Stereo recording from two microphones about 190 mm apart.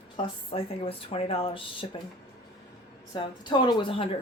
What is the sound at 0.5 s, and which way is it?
Speech, 30° left (ahead or behind).